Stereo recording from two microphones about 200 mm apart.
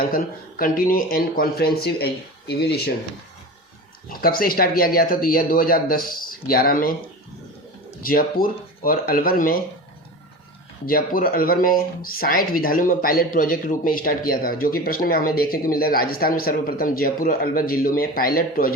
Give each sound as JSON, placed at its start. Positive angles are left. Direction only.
{"t": 0.0, "sound": "speech", "side_deg": 45}
{"t": 4.2, "sound": "speech", "side_deg": 45}
{"t": 8.0, "sound": "speech", "side_deg": 45}
{"t": 10.8, "sound": "speech", "side_deg": 45}